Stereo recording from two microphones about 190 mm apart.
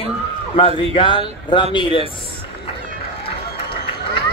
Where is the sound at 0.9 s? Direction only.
25° left (ahead or behind).